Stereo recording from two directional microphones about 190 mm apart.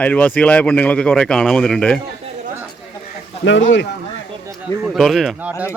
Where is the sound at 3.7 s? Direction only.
60° left (ahead or behind).